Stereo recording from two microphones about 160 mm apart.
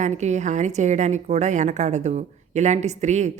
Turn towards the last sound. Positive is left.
turn(degrees=-45)  # may be behind; listen again after turning